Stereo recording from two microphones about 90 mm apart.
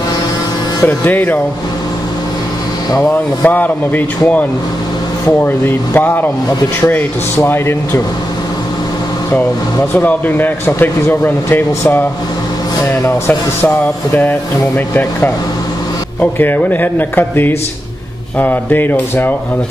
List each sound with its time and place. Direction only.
0.8 s speech: 20° left (ahead or behind)
3.1 s speech: 20° left (ahead or behind)
9.9 s speech: 20° left (ahead or behind)
15.0 s speech: 20° left (ahead or behind)